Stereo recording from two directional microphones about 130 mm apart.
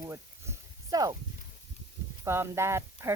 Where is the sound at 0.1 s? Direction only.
25° right (ahead or behind).